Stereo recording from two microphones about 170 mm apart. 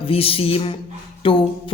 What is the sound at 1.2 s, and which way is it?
Music, 30° left (ahead or behind).